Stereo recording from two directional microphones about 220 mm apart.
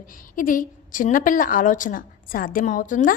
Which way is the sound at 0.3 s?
40° left (ahead or behind).